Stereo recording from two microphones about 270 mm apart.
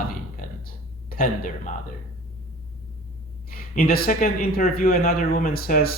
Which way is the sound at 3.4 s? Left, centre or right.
Left.